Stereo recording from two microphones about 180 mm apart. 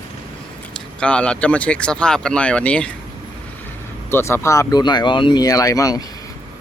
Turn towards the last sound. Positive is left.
turn(degrees=20)  # may be behind; listen again after turning